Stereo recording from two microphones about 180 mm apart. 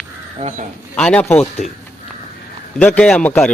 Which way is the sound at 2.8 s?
5° left (ahead or behind).